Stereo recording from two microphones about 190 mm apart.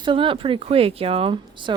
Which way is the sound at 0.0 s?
25° right (ahead or behind).